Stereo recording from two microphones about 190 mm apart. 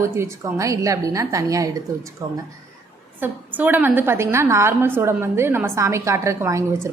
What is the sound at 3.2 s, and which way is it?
A woman's voice, 10° right (ahead or behind).